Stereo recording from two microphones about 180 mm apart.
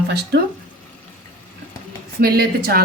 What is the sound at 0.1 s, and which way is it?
Speech, 65° right (ahead or behind).